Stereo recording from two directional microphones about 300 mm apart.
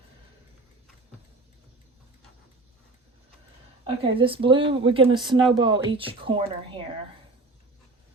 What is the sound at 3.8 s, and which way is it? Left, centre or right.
Speech, centre.